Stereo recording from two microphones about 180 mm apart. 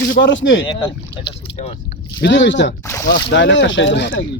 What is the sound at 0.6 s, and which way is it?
Speech, 25° left (ahead or behind).